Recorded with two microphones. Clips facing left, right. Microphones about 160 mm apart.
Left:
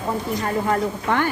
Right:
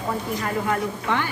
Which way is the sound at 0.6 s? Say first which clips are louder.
Left 3 dB; 50° left (ahead or behind).